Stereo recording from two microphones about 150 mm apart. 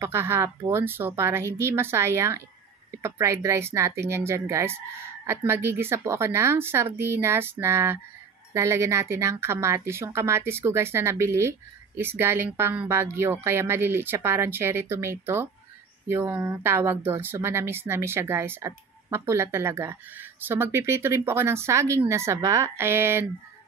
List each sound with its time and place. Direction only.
0.0 s speech: 15° right (ahead or behind)